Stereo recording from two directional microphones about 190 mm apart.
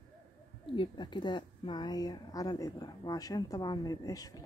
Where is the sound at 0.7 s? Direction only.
25° left (ahead or behind).